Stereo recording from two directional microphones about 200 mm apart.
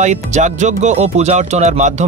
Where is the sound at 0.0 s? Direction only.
35° right (ahead or behind).